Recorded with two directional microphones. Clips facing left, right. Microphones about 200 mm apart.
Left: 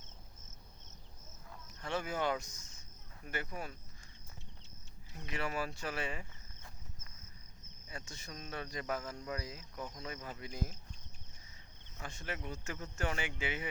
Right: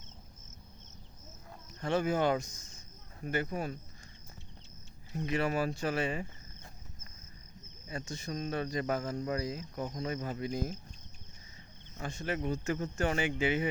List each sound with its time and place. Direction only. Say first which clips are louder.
1.8 s speech: right 7 dB; 40° right (ahead or behind)
5.1 s speech: right 8 dB; 35° right (ahead or behind)
8.1 s speech: right 10 dB; 40° right (ahead or behind)
11.9 s speech: right 8 dB; 35° right (ahead or behind)